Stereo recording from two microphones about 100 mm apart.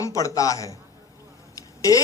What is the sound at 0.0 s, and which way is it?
A man's voice, 35° left (ahead or behind).